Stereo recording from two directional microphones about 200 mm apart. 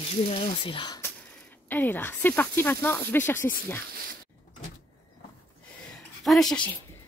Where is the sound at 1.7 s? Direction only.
10° left (ahead or behind).